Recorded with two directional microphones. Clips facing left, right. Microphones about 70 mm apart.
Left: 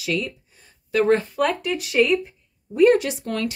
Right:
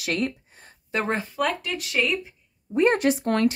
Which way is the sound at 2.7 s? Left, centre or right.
Right.